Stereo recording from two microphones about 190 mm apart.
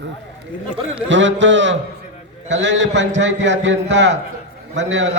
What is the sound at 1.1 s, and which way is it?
A man's voice, 70° right (ahead or behind).